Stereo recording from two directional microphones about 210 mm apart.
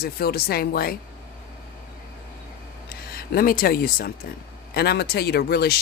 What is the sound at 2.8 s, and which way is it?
Speech, 45° left (ahead or behind).